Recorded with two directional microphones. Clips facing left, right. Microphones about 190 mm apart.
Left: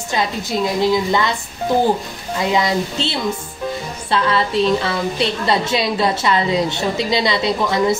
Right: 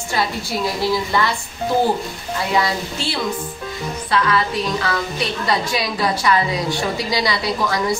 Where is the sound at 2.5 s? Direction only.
20° left (ahead or behind).